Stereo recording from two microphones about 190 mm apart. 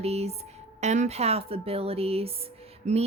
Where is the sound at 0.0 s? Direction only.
35° right (ahead or behind).